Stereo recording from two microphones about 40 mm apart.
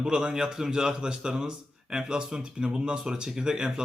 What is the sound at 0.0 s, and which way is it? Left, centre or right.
A man's voice, centre.